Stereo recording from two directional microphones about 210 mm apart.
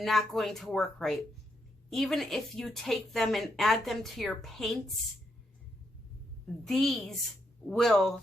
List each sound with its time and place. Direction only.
0.0 s a woman's voice: centre (ahead or behind)
6.7 s a woman's voice: centre (ahead or behind)